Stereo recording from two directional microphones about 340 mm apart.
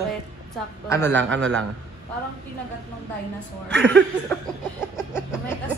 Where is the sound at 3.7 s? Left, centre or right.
Centre.